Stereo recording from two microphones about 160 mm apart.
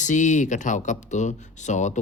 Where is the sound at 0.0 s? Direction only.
50° left (ahead or behind).